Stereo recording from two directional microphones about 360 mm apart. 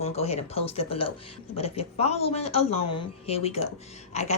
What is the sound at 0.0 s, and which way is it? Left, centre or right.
Speech, centre.